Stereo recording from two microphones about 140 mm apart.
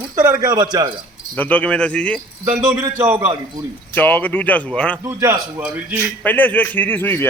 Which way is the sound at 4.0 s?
10° left (ahead or behind).